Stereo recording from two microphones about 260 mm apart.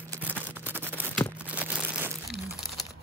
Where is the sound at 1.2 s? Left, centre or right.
Centre.